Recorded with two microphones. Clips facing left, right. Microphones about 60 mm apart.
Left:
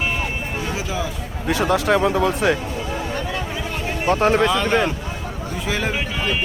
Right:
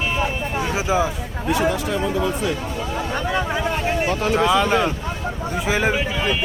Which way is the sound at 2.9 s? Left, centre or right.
Centre.